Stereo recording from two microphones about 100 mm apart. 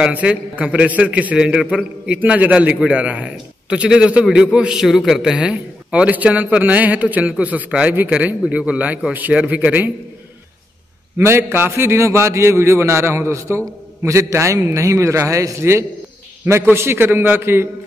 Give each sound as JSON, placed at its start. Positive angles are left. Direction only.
{"t": 0.0, "sound": "a man's voice", "side_deg": -15}
{"t": 11.1, "sound": "a man's voice", "side_deg": -25}